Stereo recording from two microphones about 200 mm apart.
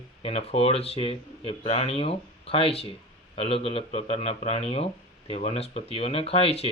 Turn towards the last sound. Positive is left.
turn(degrees=30)  # may be behind; listen again after turning